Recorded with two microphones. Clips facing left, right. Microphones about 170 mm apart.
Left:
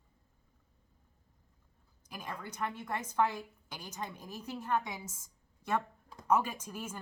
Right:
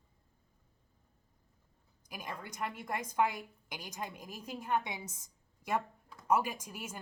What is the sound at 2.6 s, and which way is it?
A woman's voice, 10° right (ahead or behind).